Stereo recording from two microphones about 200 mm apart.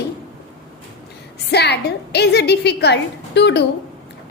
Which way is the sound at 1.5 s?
55° left (ahead or behind).